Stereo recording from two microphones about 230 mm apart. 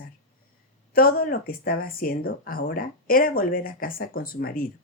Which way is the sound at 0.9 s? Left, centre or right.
Left.